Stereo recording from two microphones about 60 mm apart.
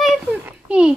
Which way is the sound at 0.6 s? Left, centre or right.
Centre.